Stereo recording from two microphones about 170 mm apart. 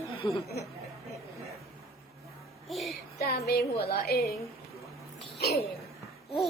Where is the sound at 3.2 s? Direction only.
65° left (ahead or behind).